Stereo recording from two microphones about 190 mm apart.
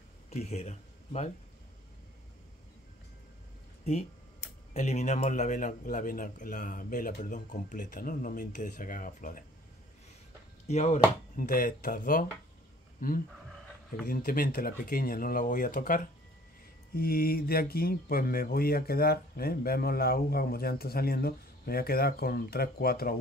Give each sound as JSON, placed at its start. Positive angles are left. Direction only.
{"t": 0.3, "sound": "speech", "side_deg": 35}
{"t": 4.7, "sound": "speech", "side_deg": 35}
{"t": 10.7, "sound": "speech", "side_deg": 35}